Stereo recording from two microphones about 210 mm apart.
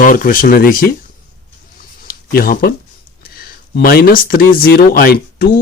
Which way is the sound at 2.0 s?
45° left (ahead or behind).